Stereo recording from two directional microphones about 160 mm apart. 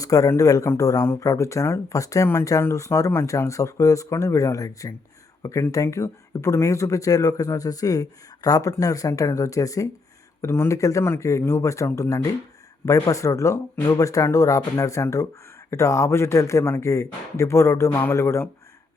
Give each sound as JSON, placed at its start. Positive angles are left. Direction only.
{"t": 0.0, "sound": "speech", "side_deg": 20}